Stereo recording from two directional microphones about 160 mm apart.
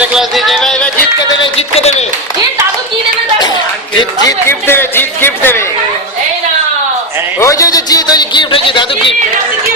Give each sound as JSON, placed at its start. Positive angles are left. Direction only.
{"t": 0.0, "sound": "music", "side_deg": -5}
{"t": 1.5, "sound": "music", "side_deg": 40}
{"t": 4.3, "sound": "speech", "side_deg": 15}
{"t": 7.3, "sound": "speech", "side_deg": 20}